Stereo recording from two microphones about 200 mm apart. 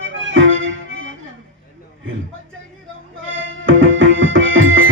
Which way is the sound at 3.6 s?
75° right (ahead or behind).